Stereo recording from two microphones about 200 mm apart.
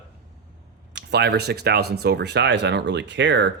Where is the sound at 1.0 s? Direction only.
55° right (ahead or behind).